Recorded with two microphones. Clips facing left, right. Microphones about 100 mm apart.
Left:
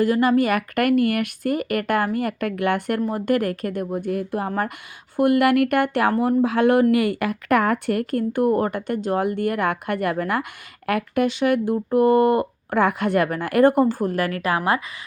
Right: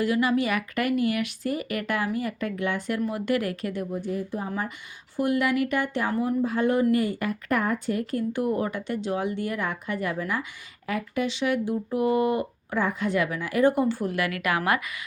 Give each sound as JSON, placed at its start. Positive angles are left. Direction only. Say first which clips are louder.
{"t": 0.0, "sound": "speech", "louder": "left 5 dB", "side_deg": 45}
{"t": 3.1, "sound": "speech", "louder": "left 6 dB", "side_deg": 45}